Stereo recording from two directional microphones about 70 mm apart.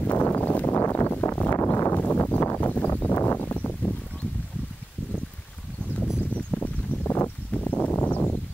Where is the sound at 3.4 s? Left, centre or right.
Left.